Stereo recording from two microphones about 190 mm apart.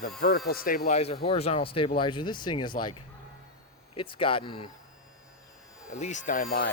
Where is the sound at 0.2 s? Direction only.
55° left (ahead or behind); by 2.7 s 25° left (ahead or behind).